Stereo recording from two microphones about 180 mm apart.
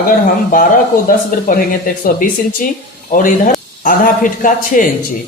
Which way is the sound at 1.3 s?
50° left (ahead or behind).